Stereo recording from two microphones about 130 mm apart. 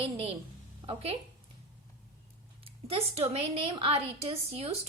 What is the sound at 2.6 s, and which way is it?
A woman's voice, 50° right (ahead or behind).